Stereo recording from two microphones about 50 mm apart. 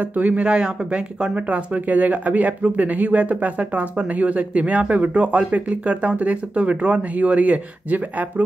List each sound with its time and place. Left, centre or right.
0.0 s speech: right